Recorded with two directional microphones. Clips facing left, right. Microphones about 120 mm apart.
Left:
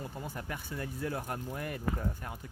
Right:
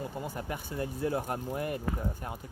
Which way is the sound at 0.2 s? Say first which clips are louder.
Right 4 dB; 20° right (ahead or behind).